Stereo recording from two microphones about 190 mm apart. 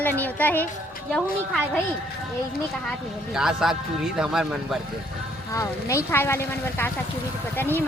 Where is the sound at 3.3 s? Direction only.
5° right (ahead or behind).